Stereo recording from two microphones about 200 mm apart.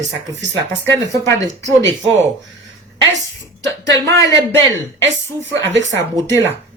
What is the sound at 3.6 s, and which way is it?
Speech, 60° right (ahead or behind).